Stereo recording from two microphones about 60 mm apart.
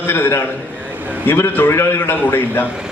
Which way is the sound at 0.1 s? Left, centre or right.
Left.